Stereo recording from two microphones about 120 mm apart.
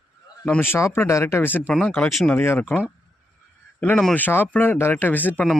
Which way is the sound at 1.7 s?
10° left (ahead or behind).